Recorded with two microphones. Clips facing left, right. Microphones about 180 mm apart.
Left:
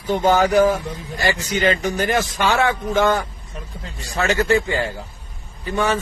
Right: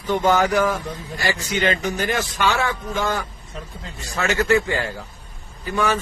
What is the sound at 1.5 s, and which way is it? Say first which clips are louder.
A man's voice: left 2 dB; 40° left (ahead or behind).